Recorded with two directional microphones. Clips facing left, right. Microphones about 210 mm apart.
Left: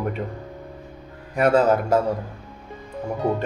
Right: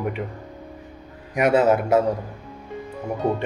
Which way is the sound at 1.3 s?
15° right (ahead or behind).